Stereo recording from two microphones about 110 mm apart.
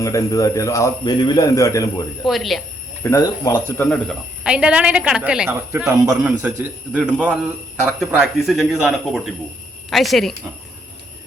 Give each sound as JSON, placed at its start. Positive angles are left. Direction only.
{"t": 0.0, "sound": "a man's voice", "side_deg": 30}
{"t": 2.2, "sound": "a man's voice", "side_deg": 0}
{"t": 3.0, "sound": "speech", "side_deg": 30}
{"t": 3.8, "sound": "speech", "side_deg": 15}
{"t": 4.4, "sound": "a woman's voice", "side_deg": -10}
{"t": 5.5, "sound": "speech", "side_deg": -25}
{"t": 6.1, "sound": "a woman's voice", "side_deg": -10}